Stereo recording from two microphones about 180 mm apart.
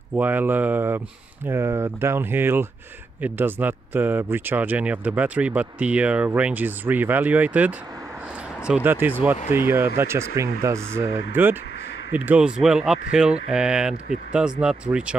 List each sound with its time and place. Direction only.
0.1 s speech: 10° right (ahead or behind)